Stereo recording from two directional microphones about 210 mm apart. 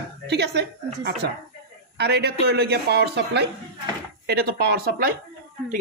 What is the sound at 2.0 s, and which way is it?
Speech, 50° right (ahead or behind).